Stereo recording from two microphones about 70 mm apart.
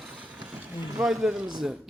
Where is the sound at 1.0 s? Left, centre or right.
Centre.